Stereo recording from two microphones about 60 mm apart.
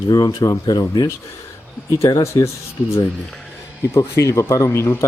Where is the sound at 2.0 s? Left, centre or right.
Left.